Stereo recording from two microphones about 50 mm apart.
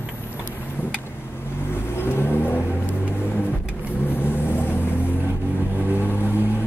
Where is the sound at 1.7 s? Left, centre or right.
Left.